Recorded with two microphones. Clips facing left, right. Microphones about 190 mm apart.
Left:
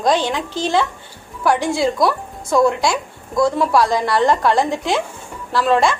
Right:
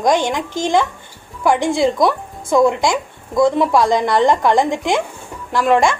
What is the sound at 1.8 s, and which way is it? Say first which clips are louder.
A woman's voice: right 2 dB; 20° right (ahead or behind).